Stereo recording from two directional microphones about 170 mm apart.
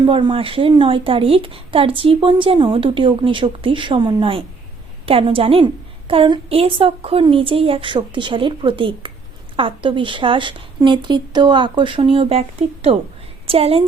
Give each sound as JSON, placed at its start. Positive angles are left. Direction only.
{"t": 0.0, "sound": "a woman's voice", "side_deg": -30}